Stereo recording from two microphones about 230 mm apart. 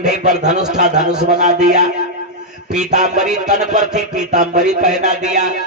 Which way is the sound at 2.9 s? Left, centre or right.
Right.